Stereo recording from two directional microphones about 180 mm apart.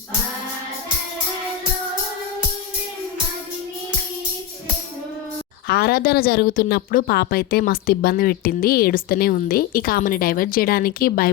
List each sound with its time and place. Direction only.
5.6 s speech: 60° left (ahead or behind)